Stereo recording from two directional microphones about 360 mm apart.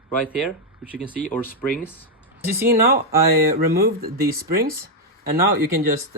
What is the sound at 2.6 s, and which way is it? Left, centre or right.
Speech, right.